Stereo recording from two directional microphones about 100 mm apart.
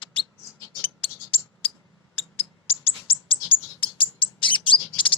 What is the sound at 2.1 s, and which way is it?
Bird, 70° left (ahead or behind).